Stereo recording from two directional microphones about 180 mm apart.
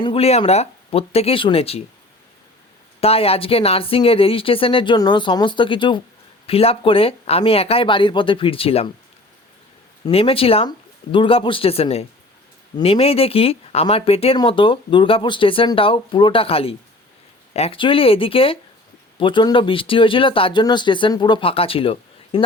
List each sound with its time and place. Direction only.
0.0 s speech: 30° left (ahead or behind)
3.0 s speech: 35° left (ahead or behind)
10.1 s speech: 30° left (ahead or behind)